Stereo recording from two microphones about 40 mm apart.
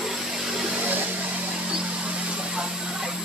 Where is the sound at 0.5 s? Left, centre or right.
Right.